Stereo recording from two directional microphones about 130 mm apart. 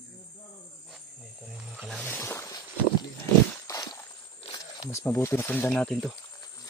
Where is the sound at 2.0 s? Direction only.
15° left (ahead or behind).